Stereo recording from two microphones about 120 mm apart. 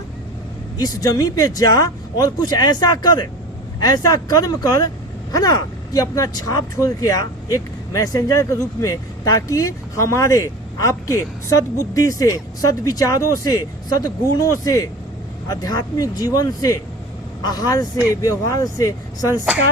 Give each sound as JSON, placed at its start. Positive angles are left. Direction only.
{"t": 0.8, "sound": "speech", "side_deg": 30}